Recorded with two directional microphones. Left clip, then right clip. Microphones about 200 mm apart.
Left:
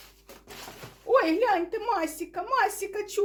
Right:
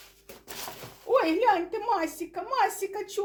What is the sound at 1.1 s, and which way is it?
A woman's voice, 40° left (ahead or behind).